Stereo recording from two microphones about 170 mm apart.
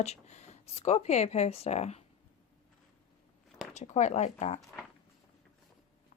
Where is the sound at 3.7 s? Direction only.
40° left (ahead or behind).